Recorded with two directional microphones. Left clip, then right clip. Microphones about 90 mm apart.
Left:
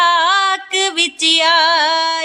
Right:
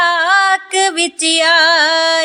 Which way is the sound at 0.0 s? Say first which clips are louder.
Right 1 dB; 35° right (ahead or behind).